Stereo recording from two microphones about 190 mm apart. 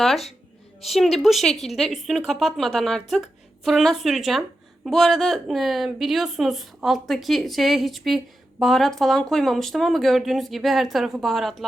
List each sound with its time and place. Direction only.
0.9 s speech: centre (ahead or behind)